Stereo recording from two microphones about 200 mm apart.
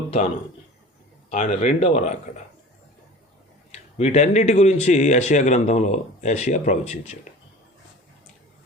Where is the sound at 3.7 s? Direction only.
35° left (ahead or behind).